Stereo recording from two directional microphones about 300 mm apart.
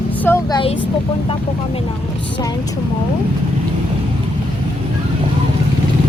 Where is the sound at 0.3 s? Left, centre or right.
Centre.